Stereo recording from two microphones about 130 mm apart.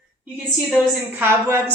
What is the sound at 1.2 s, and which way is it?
Speech, 20° right (ahead or behind).